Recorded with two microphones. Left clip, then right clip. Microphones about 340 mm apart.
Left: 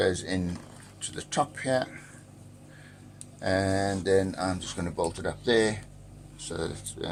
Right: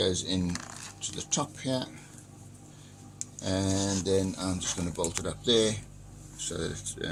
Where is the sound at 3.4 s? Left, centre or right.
Left.